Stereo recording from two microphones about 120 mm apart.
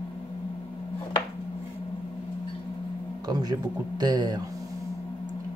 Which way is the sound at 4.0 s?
35° right (ahead or behind).